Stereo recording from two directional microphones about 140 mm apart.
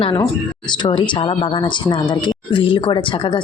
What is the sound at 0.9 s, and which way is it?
A woman's voice, 35° left (ahead or behind).